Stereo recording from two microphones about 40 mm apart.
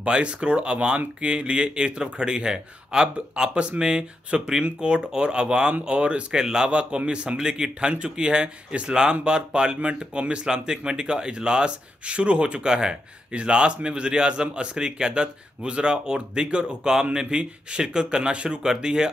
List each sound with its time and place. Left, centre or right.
0.0 s a man's voice: right